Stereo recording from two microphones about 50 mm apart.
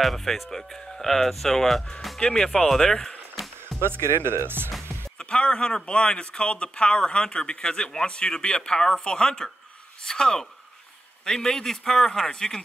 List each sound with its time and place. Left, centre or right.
0.0 s speech: centre
3.6 s speech: right
5.3 s speech: centre